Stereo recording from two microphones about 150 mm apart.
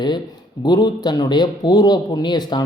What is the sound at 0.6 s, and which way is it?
A man's voice, 30° left (ahead or behind).